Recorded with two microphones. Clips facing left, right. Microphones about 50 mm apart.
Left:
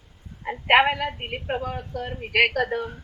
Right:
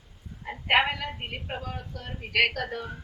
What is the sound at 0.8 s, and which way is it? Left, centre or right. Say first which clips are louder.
A woman's voice: left 6 dB; left.